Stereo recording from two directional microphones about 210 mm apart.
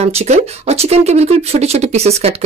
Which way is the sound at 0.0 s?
30° right (ahead or behind).